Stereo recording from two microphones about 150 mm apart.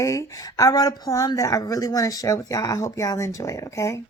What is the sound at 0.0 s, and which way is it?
Speech, 20° left (ahead or behind).